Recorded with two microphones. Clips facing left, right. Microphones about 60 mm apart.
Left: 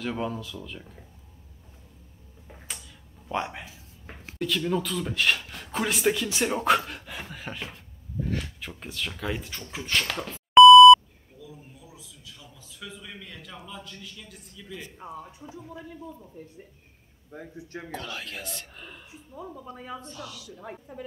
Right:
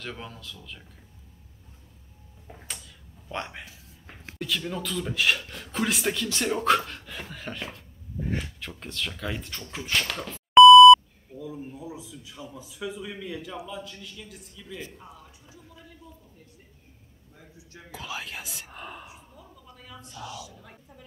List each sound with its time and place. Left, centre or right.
0.0 s speech: centre
3.3 s a man's voice: centre
8.2 s speech: centre
8.5 s speech: centre
11.3 s a sound: right; by 14.9 s centre
15.0 s a woman's voice: left
17.3 s a man's voice: left
17.9 s a man's voice: centre
19.3 s a woman's voice: left
20.9 s speech: left